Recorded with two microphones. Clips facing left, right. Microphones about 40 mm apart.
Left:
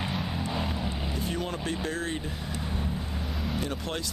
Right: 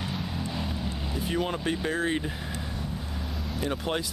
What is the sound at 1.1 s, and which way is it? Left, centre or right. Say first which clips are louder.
Speech: right 6 dB; centre.